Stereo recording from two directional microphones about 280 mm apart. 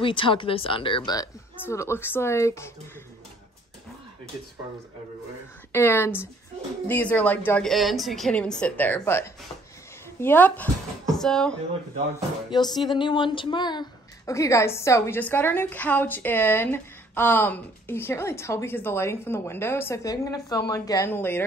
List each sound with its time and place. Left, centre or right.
0.0 s a woman's voice: centre
5.7 s a woman's voice: centre
12.4 s a woman's voice: centre